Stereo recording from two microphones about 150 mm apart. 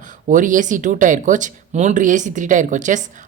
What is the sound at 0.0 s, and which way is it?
Speech, 60° right (ahead or behind).